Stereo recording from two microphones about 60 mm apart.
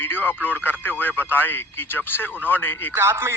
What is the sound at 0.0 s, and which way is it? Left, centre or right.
Speech, left.